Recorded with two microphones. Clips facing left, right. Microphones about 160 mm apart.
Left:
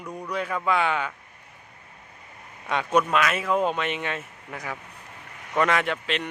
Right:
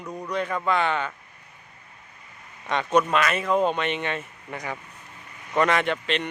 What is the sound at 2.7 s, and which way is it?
A man's voice, 5° left (ahead or behind).